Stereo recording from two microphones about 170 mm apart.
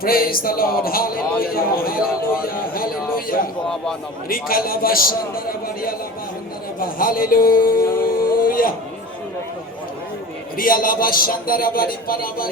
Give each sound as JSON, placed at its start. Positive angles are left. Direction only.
{"t": 0.0, "sound": "a man's voice", "side_deg": 60}
{"t": 8.0, "sound": "a sound", "side_deg": 60}
{"t": 10.6, "sound": "a man's voice", "side_deg": 55}